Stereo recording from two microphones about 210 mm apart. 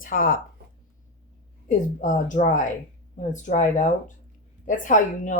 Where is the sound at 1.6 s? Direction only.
35° left (ahead or behind).